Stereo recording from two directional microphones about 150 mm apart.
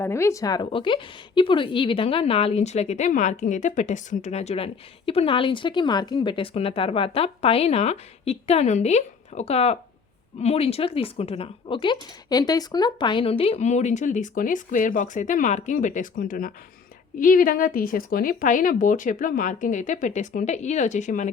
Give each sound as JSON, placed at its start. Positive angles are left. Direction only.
{"t": 0.0, "sound": "a woman's voice", "side_deg": 20}